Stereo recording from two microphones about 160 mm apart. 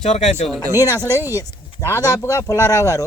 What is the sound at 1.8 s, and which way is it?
Speech, 15° left (ahead or behind).